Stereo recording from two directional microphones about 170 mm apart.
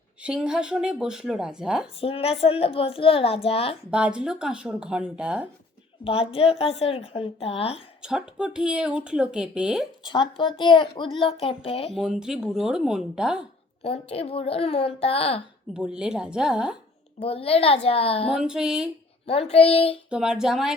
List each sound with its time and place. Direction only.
0.2 s speech: 5° right (ahead or behind)
2.0 s a woman's voice: 35° left (ahead or behind)
3.9 s speech: 5° right (ahead or behind)
6.1 s a woman's voice: 35° left (ahead or behind)
8.0 s speech: 5° right (ahead or behind)
10.0 s a woman's voice: 30° left (ahead or behind)
11.9 s speech: 5° right (ahead or behind)
13.8 s a woman's voice: 35° left (ahead or behind)
15.7 s speech: 5° right (ahead or behind)
17.2 s a woman's voice: 35° left (ahead or behind)
18.3 s speech: 5° right (ahead or behind)
19.3 s a woman's voice: 35° left (ahead or behind)
20.1 s speech: 5° right (ahead or behind)